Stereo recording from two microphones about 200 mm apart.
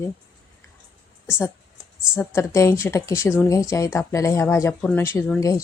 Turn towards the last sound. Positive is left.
turn(degrees=10)  # may be behind; listen again after turning